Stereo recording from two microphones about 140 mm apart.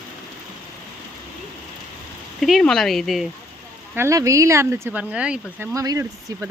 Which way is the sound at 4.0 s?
20° right (ahead or behind).